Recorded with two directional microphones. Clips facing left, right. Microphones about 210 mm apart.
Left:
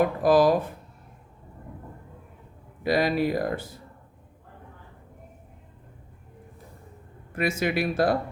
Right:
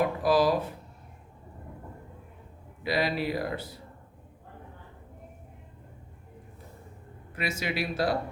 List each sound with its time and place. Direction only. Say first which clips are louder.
0.0 s speech: left 4 dB; 50° left (ahead or behind)
2.8 s speech: left 5 dB; 45° left (ahead or behind)
7.3 s speech: left 6 dB; 50° left (ahead or behind)